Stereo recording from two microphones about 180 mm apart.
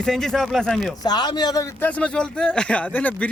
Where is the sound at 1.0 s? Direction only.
20° left (ahead or behind).